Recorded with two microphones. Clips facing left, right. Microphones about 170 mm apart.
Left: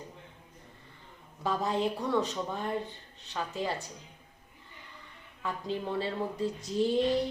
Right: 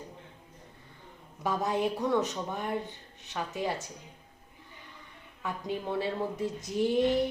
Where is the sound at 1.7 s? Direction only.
15° right (ahead or behind).